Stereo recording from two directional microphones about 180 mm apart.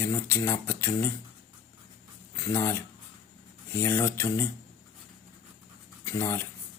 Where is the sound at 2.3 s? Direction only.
15° left (ahead or behind).